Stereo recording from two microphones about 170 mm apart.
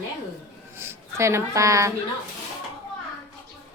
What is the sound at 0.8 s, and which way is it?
A woman's voice, 15° right (ahead or behind).